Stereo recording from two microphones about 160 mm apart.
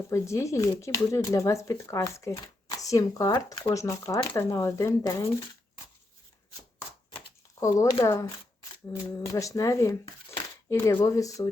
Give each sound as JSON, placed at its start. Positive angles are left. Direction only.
{"t": 0.1, "sound": "speech", "side_deg": 20}
{"t": 7.6, "sound": "speech", "side_deg": 20}